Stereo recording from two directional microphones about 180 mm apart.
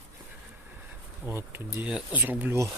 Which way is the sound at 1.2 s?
10° right (ahead or behind).